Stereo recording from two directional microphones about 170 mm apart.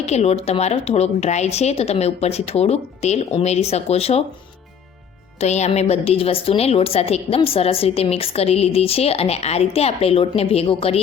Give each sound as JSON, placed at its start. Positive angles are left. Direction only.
{"t": 0.0, "sound": "a woman's voice", "side_deg": 40}
{"t": 5.4, "sound": "a woman's voice", "side_deg": 40}